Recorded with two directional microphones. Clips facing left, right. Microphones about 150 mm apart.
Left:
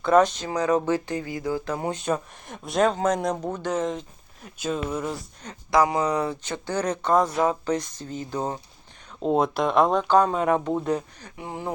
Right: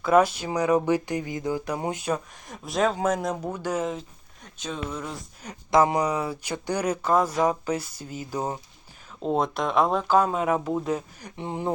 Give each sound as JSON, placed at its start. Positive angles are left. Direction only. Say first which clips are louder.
{"t": 0.0, "sound": "speech", "louder": "left 1 dB", "side_deg": -5}
{"t": 2.1, "sound": "speech", "louder": "left 1 dB", "side_deg": 0}
{"t": 4.5, "sound": "speech", "louder": "left 5 dB", "side_deg": 10}
{"t": 5.7, "sound": "speech", "louder": "right 1 dB", "side_deg": -20}
{"t": 6.1, "sound": "speech", "louder": "left 2 dB", "side_deg": -5}
{"t": 9.2, "sound": "speech", "louder": "left 3 dB", "side_deg": 0}
{"t": 11.3, "sound": "speech", "louder": "right 3 dB", "side_deg": -20}